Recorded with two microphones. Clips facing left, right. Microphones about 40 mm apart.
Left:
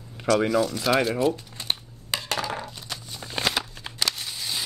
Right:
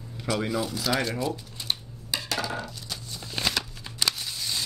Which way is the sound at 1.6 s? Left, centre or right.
Left.